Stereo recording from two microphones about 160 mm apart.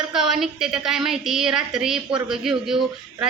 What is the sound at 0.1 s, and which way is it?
Speech, centre (ahead or behind).